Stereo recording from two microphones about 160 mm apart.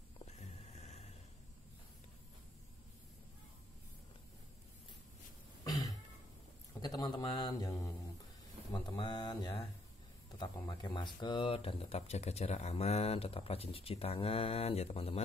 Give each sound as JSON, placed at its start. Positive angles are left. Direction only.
{"t": 0.4, "sound": "a sound", "side_deg": 45}
{"t": 5.6, "sound": "throat clearing", "side_deg": 25}
{"t": 6.8, "sound": "a man's voice", "side_deg": 25}